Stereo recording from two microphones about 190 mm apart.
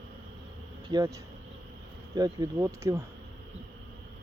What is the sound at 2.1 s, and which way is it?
Speech, 20° right (ahead or behind).